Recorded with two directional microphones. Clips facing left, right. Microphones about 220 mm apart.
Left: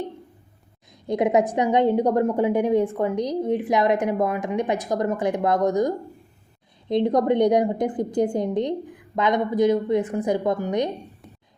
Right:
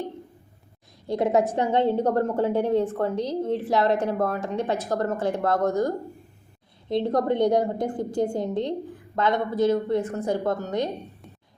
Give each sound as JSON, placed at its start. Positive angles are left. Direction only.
{"t": 1.0, "sound": "a woman's voice", "side_deg": 15}